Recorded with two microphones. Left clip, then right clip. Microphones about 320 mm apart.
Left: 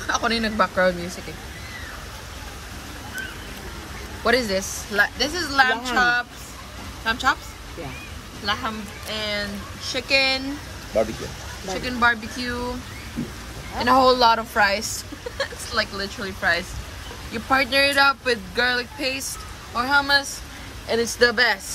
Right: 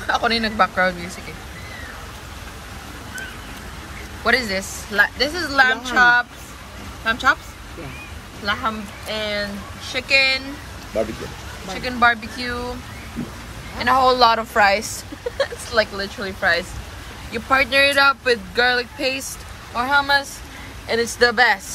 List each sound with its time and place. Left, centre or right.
0.0 s a woman's voice: centre
4.2 s a woman's voice: centre
8.6 s a woman's voice: centre
11.7 s a woman's voice: centre
13.7 s a woman's voice: centre